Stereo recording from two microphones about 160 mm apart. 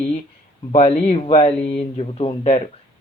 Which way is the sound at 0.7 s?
40° left (ahead or behind).